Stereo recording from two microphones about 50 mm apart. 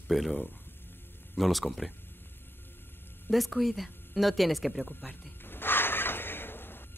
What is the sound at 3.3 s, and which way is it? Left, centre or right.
Speech, centre.